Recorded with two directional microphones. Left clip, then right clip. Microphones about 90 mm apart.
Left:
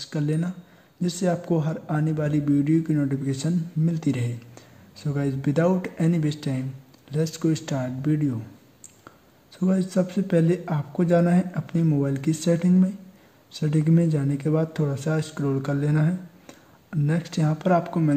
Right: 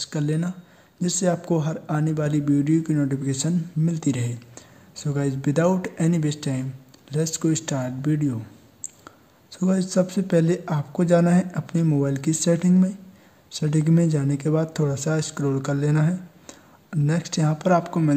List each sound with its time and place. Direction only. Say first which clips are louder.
0.0 s speech: right 1 dB; 25° right (ahead or behind)